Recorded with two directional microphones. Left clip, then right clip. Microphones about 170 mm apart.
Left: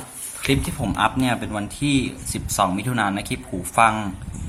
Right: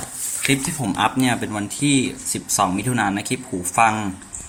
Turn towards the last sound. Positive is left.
turn(degrees=10)  # may be behind; listen again after turning